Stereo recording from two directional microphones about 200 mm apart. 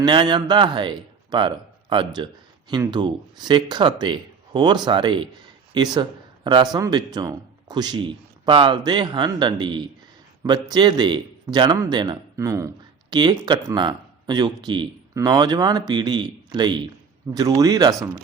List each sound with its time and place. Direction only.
0.0 s a man's voice: 25° right (ahead or behind)